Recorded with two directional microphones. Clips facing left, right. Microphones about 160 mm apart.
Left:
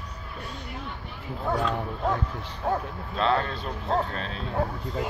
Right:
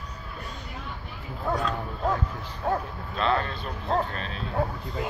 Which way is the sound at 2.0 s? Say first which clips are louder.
Right 1 dB; 5° right (ahead or behind).